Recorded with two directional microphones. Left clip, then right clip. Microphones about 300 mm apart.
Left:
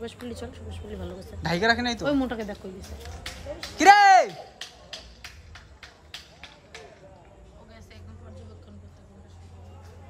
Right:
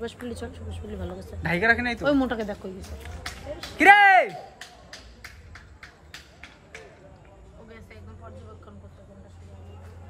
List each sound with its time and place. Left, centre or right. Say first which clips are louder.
0.0 s a woman's voice: right 2 dB; centre
2.0 s a woman's voice: right 5 dB; centre
3.6 s music: even; centre
6.1 s a sound: left 4 dB; left